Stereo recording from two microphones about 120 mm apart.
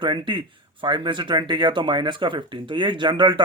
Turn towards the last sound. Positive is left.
turn(degrees=-40)  # may be behind; listen again after turning